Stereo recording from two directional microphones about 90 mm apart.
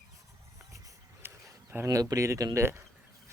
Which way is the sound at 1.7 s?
30° right (ahead or behind).